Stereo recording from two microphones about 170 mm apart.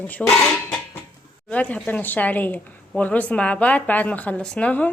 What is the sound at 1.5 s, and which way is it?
A woman's voice, 10° left (ahead or behind).